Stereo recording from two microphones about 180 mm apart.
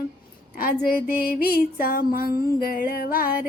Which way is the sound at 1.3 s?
55° left (ahead or behind).